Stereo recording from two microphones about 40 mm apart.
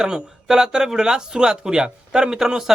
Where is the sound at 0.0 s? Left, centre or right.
Centre.